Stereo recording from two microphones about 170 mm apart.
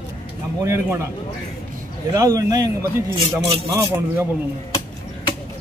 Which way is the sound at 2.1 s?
20° right (ahead or behind).